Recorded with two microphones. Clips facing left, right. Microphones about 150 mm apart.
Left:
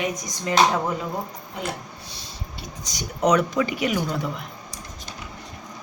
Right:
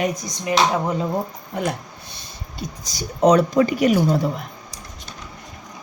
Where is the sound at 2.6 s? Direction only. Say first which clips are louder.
Right 5 dB; 30° right (ahead or behind).